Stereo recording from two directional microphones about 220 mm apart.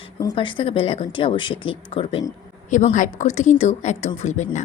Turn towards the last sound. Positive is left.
turn(degrees=35)  # may be behind; listen again after turning